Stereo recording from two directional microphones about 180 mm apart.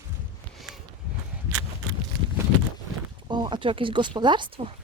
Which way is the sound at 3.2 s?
25° right (ahead or behind).